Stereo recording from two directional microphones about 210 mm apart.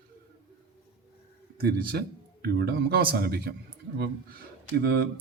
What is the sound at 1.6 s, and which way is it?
Speech, 50° right (ahead or behind).